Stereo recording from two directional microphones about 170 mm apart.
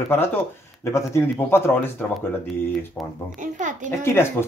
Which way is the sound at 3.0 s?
10° left (ahead or behind).